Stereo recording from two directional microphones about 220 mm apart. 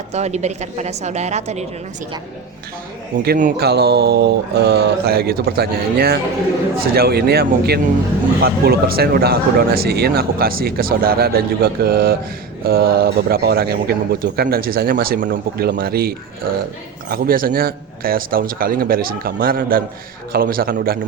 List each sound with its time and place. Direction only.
0.1 s a man's voice: 30° right (ahead or behind)
3.2 s a man's voice: 40° right (ahead or behind)